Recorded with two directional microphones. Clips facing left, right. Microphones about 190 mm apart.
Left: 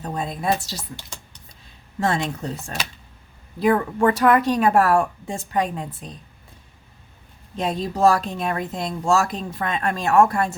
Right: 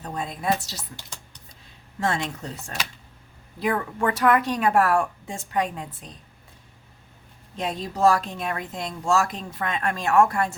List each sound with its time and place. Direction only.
0.0 s speech: 35° left (ahead or behind)
2.0 s speech: 35° left (ahead or behind)
7.5 s speech: 35° left (ahead or behind)